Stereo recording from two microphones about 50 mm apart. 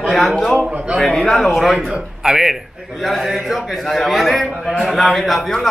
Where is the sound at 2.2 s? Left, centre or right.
Centre.